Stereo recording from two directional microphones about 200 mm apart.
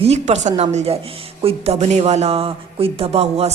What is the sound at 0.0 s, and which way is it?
A woman's voice, 35° right (ahead or behind).